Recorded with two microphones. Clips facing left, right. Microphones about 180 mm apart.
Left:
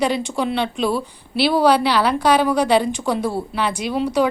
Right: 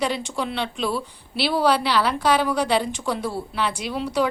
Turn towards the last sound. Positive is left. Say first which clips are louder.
# left 5 dB
turn(degrees=0)  # may be behind; listen again after turning